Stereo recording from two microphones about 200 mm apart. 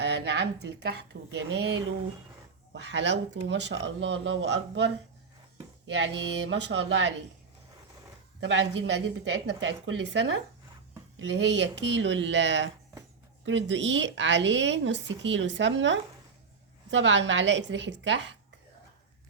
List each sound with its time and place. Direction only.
0.0 s a woman's voice: 55° right (ahead or behind)
5.9 s a woman's voice: 65° right (ahead or behind)
8.4 s a woman's voice: 65° right (ahead or behind)